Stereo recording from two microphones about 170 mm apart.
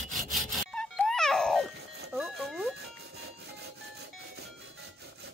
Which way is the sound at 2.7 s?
80° right.